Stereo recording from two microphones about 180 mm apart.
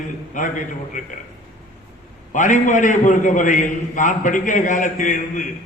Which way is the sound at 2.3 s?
45° left (ahead or behind).